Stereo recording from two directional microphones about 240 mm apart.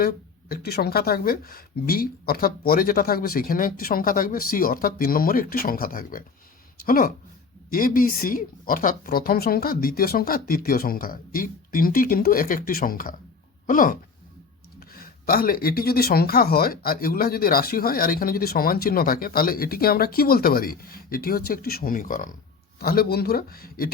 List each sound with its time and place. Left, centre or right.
0.0 s speech: left